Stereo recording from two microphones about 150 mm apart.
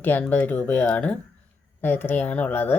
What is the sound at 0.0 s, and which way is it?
Speech, 10° left (ahead or behind).